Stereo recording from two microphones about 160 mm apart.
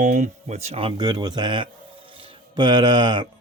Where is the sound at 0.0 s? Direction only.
50° right (ahead or behind).